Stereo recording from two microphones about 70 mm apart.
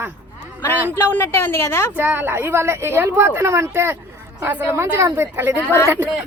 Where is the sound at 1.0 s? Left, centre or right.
Left.